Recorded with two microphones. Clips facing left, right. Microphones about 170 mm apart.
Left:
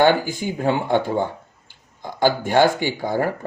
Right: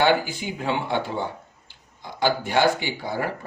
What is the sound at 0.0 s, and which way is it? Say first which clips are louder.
Speech: left 4 dB; 50° left (ahead or behind).